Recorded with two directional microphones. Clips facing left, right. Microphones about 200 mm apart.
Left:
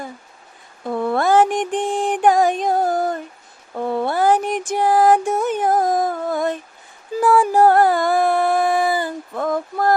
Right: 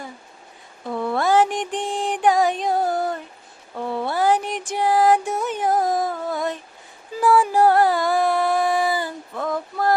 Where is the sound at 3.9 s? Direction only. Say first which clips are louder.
Left 3 dB; 50° left (ahead or behind).